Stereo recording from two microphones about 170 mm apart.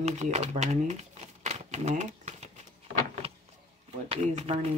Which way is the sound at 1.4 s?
40° right (ahead or behind).